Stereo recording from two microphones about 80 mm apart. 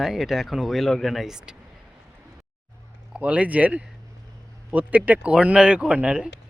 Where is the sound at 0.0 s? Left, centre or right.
Centre.